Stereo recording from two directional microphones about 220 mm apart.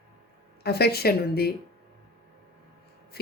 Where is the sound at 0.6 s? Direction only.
45° left (ahead or behind).